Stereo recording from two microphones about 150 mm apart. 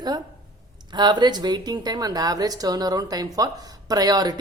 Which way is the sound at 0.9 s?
30° right (ahead or behind).